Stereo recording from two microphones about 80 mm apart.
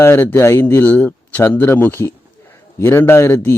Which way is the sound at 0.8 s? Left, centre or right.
Centre.